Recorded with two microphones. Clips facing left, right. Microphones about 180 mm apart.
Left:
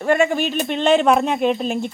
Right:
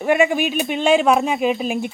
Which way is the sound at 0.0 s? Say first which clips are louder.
Right 1 dB; 10° right (ahead or behind).